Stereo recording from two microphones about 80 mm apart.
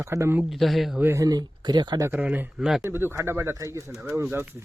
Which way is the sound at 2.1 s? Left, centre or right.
Right.